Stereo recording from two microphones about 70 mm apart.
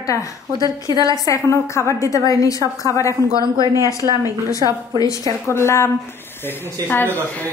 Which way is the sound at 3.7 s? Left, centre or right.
Right.